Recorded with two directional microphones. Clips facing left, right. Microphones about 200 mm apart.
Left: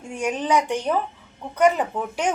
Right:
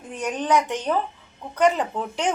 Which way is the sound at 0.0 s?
10° left (ahead or behind).